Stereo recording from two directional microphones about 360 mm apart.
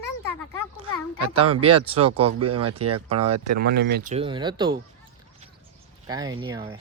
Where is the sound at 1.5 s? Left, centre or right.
Right.